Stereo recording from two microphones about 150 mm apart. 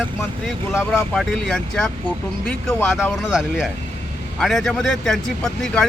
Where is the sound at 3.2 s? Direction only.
5° right (ahead or behind).